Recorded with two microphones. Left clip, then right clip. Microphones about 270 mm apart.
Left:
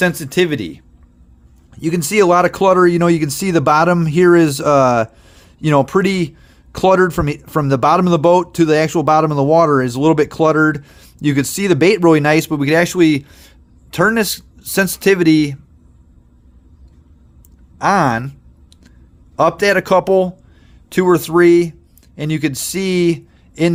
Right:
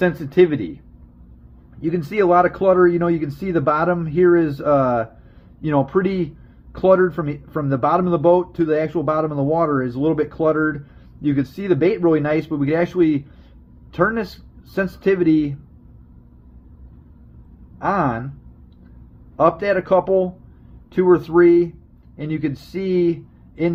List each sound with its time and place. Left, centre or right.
0.0 s speech: left
1.8 s speech: left
17.7 s speech: left
19.4 s a man's voice: left